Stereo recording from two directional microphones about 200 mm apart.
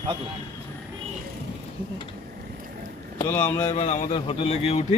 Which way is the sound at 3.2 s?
10° left (ahead or behind).